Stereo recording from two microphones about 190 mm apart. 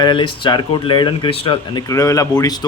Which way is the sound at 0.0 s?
25° left (ahead or behind).